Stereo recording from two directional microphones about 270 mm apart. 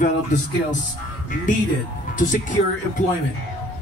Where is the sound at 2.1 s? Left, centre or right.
Left.